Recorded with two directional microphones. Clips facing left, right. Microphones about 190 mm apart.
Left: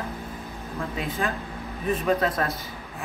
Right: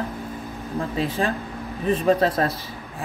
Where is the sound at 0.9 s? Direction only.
30° right (ahead or behind).